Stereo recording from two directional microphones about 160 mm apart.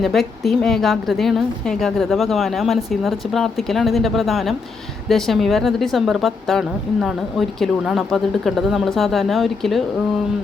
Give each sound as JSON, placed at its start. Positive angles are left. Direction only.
{"t": 0.0, "sound": "speech", "side_deg": 0}